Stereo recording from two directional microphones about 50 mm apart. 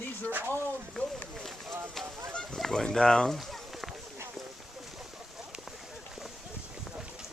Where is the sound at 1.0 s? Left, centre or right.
Centre.